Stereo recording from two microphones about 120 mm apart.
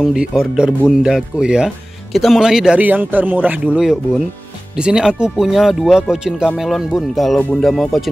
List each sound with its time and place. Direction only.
0.0 s speech: 5° right (ahead or behind)